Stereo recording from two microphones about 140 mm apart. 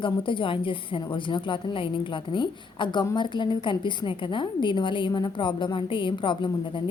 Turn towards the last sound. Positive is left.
turn(degrees=35)  # may be behind; listen again after turning